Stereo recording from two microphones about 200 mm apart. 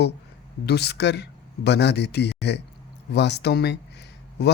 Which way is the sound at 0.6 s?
55° left (ahead or behind).